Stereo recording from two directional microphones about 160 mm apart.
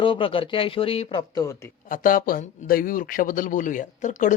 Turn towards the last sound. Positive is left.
turn(degrees=50)  # may be behind; listen again after turning